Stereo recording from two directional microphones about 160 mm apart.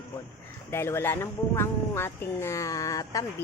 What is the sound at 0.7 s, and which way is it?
Speech, 15° left (ahead or behind).